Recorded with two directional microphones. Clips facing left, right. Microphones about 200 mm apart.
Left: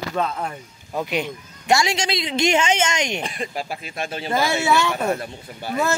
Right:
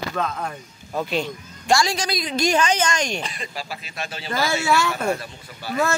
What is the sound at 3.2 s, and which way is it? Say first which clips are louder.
Speech: left 4 dB; 50° left (ahead or behind).